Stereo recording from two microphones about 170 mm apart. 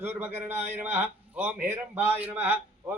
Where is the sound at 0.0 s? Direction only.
10° right (ahead or behind).